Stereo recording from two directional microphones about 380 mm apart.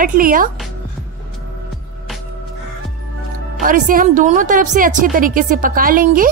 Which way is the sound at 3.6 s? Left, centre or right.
Right.